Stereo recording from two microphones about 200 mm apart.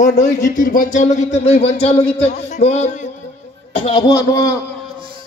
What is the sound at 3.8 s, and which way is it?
Speech, 25° left (ahead or behind).